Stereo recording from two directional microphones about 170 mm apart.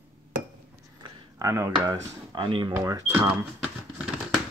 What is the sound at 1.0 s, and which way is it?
Speech, 20° right (ahead or behind).